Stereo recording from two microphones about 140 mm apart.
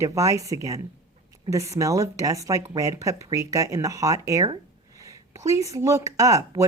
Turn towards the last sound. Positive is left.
turn(degrees=-25)  # may be behind; listen again after turning